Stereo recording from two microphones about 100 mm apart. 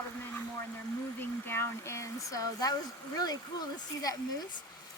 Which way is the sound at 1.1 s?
20° left (ahead or behind).